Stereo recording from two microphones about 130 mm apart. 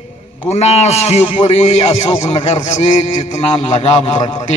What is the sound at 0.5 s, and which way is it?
A man's voice, 55° left (ahead or behind).